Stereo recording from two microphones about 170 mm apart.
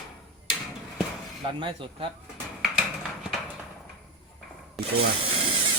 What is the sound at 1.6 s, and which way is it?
Speech, 30° right (ahead or behind).